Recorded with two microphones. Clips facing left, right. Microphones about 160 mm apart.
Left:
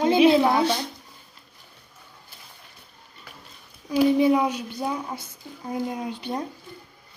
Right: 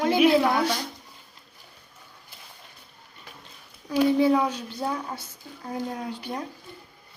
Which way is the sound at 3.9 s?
15° left (ahead or behind).